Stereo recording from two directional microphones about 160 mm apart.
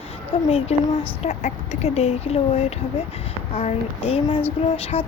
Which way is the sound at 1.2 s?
45° left (ahead or behind).